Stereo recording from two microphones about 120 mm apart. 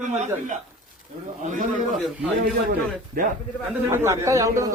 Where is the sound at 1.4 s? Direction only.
90° right.